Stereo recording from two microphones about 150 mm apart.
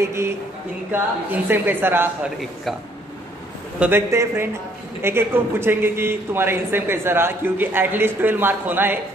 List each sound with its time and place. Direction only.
0.0 s speech: 20° right (ahead or behind)
3.8 s speech: 15° right (ahead or behind)